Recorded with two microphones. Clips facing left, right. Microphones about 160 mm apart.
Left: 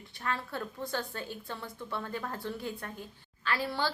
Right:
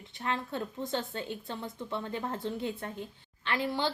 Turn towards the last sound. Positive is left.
turn(degrees=-20)  # may be behind; listen again after turning